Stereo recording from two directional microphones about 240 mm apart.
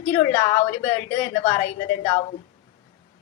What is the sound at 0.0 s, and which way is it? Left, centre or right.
Speech, left.